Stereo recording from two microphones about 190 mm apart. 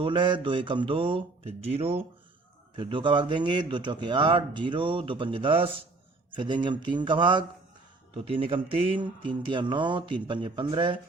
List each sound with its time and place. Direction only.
0.0 s a man's voice: 25° right (ahead or behind)